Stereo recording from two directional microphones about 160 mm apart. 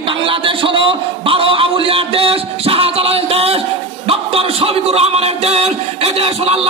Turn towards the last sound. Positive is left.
turn(degrees=-40)  # may be behind; listen again after turning